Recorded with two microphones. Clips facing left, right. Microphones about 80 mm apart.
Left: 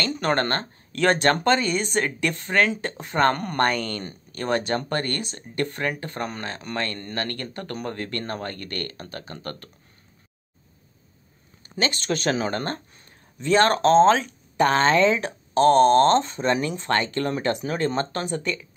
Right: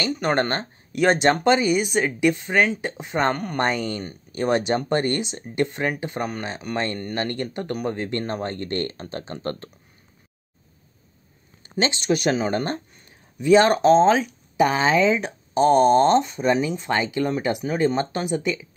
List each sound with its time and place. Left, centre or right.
0.1 s speech: centre; by 9.7 s right
11.8 s speech: centre